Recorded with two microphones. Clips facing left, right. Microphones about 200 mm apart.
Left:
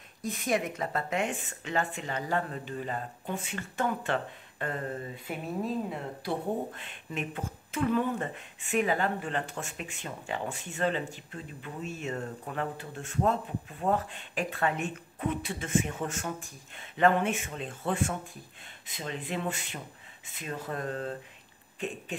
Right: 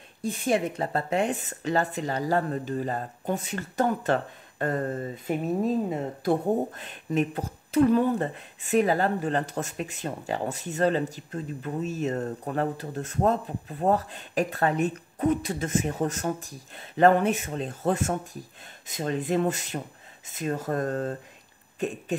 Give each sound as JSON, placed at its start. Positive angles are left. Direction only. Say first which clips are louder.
{"t": 0.2, "sound": "speech", "louder": "right 4 dB", "side_deg": -30}